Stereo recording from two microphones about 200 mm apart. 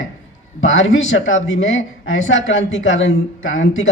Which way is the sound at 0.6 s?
75° left (ahead or behind).